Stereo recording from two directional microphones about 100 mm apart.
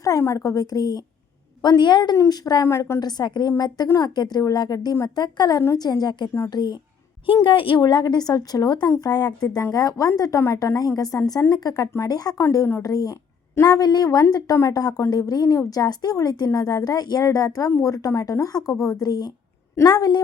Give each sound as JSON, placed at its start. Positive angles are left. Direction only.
{"t": 0.0, "sound": "a woman's voice", "side_deg": 35}
{"t": 2.1, "sound": "a woman's voice", "side_deg": 35}
{"t": 2.6, "sound": "a woman's voice", "side_deg": 30}
{"t": 3.0, "sound": "a woman's voice", "side_deg": 45}
{"t": 7.4, "sound": "a woman's voice", "side_deg": 60}
{"t": 7.8, "sound": "a woman's voice", "side_deg": 45}